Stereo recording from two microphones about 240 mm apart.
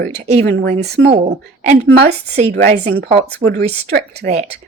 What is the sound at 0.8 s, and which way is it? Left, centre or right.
Speech, right.